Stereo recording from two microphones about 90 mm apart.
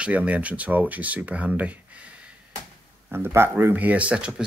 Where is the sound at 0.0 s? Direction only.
15° right (ahead or behind).